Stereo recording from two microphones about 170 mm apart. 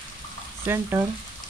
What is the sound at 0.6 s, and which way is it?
Frying, 15° right (ahead or behind).